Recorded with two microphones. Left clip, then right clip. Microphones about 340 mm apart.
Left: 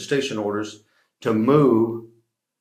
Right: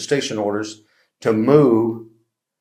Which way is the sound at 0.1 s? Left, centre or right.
Right.